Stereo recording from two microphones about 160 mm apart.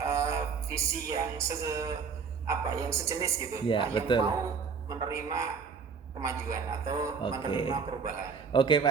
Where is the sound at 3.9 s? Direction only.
30° left (ahead or behind).